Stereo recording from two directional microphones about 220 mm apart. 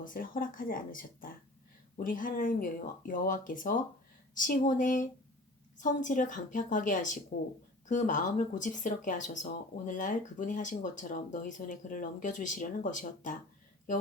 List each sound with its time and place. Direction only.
0.0 s speech: 40° left (ahead or behind)